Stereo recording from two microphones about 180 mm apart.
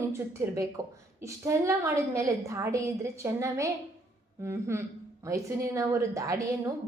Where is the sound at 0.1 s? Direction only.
15° right (ahead or behind).